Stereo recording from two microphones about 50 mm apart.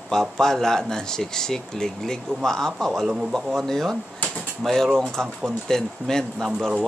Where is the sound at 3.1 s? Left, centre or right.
Centre.